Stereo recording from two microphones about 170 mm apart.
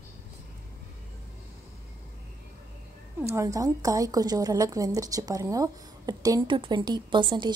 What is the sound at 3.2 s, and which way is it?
A woman's voice, 15° right (ahead or behind).